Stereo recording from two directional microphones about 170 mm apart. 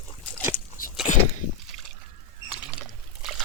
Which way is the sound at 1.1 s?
50° left (ahead or behind).